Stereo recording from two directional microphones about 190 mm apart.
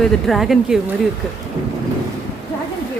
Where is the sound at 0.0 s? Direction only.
Centre (ahead or behind).